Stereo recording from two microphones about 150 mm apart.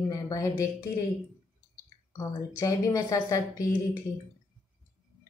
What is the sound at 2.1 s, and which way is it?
A woman's voice, 20° left (ahead or behind).